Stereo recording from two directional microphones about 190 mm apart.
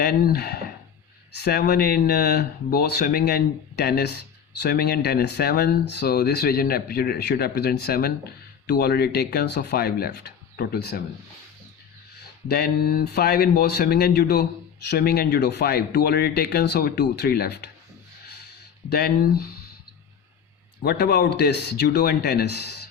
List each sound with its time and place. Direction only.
0.0 s speech: 55° left (ahead or behind)
12.5 s speech: 55° left (ahead or behind)
18.9 s speech: 55° left (ahead or behind)
20.8 s speech: 55° left (ahead or behind)